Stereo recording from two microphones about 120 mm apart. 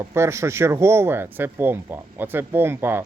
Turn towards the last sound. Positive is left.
turn(degrees=-20)  # may be behind; listen again after turning